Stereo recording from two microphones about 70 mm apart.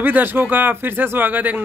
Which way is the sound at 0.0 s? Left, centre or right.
Right.